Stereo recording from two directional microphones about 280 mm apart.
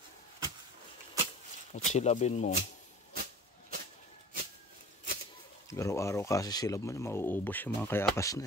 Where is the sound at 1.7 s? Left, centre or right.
Left.